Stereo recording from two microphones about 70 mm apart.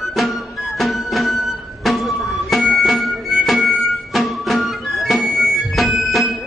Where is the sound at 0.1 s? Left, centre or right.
Centre.